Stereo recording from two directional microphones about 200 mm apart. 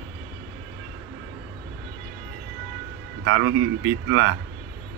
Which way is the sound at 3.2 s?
70° right (ahead or behind).